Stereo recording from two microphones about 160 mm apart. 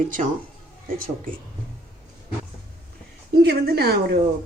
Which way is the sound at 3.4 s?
80° right.